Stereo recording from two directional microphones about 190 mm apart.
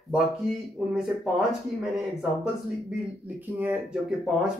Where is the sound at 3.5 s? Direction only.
5° right (ahead or behind).